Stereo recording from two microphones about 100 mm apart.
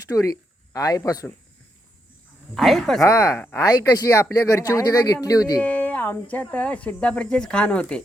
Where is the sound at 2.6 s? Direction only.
Centre (ahead or behind).